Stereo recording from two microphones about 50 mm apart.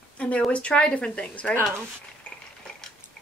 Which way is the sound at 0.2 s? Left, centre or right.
Left.